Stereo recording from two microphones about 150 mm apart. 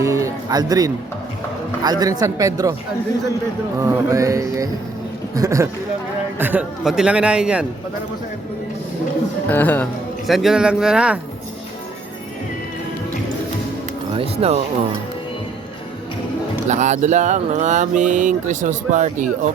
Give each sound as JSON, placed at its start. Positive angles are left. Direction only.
{"t": 0.0, "sound": "music", "side_deg": -20}
{"t": 3.8, "sound": "music", "side_deg": -20}
{"t": 5.3, "sound": "speech", "side_deg": -20}
{"t": 6.4, "sound": "a man's voice", "side_deg": -10}
{"t": 9.5, "sound": "speech", "side_deg": 10}
{"t": 10.2, "sound": "speech", "side_deg": 0}
{"t": 14.2, "sound": "speech", "side_deg": -45}
{"t": 16.6, "sound": "mantra", "side_deg": -50}